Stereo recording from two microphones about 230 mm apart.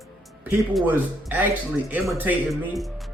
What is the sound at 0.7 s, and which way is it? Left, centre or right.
Speech, centre.